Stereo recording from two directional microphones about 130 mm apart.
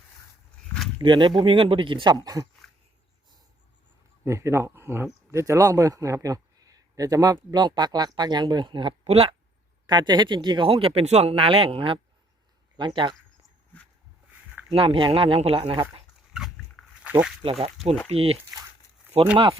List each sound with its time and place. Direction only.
0.9 s speech: 35° right (ahead or behind)
4.2 s a man's voice: 20° right (ahead or behind); by 9.0 s 35° right (ahead or behind)
9.0 s speech: 50° right (ahead or behind)
9.8 s speech: 35° right (ahead or behind)
14.7 s speech: 45° right (ahead or behind)
16.3 s a sound: 5° right (ahead or behind)
17.1 s speech: 10° right (ahead or behind)
17.4 s speech: 50° right (ahead or behind)